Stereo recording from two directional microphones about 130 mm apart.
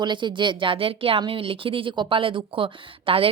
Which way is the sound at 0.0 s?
35° right (ahead or behind).